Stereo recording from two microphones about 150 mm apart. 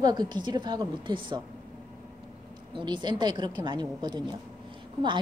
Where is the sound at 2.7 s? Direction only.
30° right (ahead or behind).